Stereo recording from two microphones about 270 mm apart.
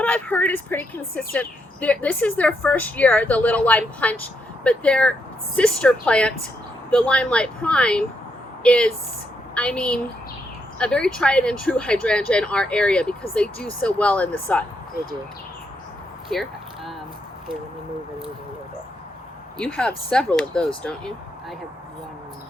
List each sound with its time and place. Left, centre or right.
0.0 s speech: centre
16.3 s a sound: centre
19.5 s speech: centre